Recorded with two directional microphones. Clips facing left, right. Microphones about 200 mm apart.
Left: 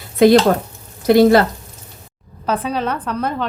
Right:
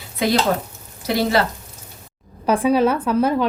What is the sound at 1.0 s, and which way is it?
Speech, 50° left (ahead or behind).